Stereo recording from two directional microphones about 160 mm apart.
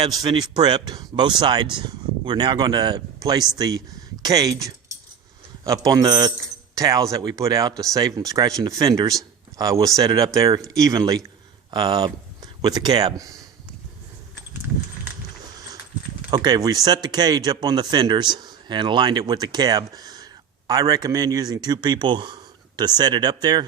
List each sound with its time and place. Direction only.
0.2 s speech: 25° right (ahead or behind)
16.3 s speech: 25° right (ahead or behind)